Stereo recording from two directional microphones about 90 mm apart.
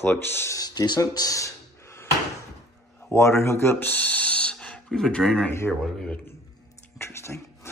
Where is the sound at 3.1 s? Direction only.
30° left (ahead or behind); by 5.5 s 10° left (ahead or behind).